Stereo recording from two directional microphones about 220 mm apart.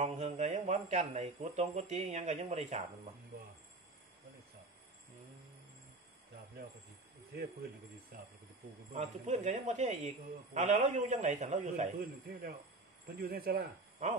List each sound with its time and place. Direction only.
0.0 s speech: 30° right (ahead or behind)
8.9 s a man's voice: 30° right (ahead or behind)